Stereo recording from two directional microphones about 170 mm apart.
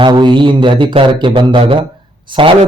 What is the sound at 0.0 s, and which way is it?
A man's voice, 30° right (ahead or behind).